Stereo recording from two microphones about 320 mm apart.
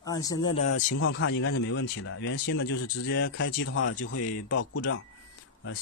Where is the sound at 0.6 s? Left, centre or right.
Left.